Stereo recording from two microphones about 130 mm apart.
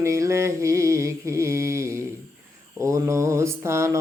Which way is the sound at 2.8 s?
25° right (ahead or behind).